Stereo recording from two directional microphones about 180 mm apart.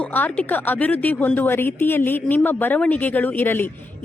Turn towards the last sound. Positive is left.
turn(degrees=10)  # may be behind; listen again after turning